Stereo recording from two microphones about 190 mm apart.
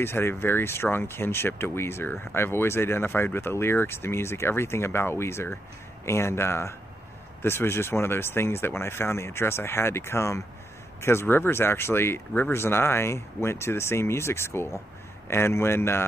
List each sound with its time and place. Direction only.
0.0 s speech: 10° left (ahead or behind)